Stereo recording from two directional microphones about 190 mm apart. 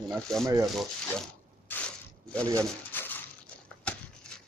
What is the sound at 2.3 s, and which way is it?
Speech, 5° left (ahead or behind).